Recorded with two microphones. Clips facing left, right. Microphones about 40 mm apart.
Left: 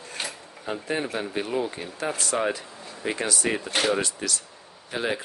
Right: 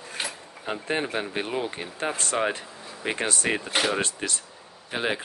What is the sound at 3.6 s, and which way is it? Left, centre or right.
Speech, centre.